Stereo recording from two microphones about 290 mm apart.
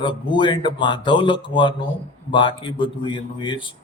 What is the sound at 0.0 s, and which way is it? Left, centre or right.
A man's voice, centre.